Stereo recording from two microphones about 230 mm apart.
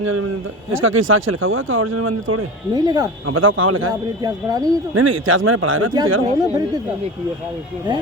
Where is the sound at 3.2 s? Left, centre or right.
Right.